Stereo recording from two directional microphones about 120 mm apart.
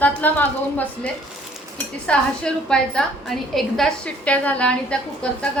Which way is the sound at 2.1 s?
5° left (ahead or behind).